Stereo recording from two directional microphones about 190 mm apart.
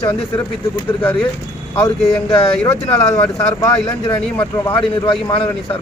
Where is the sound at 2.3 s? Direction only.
30° left (ahead or behind).